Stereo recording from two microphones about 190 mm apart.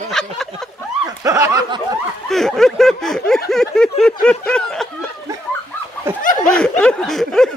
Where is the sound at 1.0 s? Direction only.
20° right (ahead or behind).